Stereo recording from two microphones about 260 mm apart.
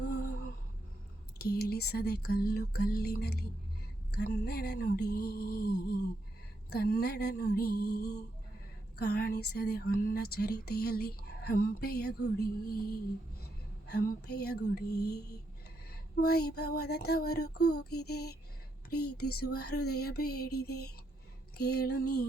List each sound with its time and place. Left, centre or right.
1.4 s speech: left
17.4 s a sound: left
17.9 s speech: left